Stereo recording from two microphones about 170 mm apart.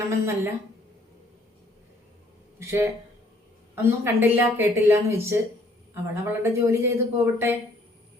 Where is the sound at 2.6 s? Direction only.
15° right (ahead or behind).